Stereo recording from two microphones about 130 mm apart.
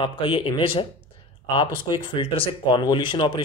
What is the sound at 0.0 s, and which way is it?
Speech, 40° left (ahead or behind).